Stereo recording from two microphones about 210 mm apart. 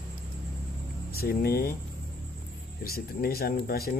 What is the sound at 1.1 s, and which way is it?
Speech, 45° left (ahead or behind).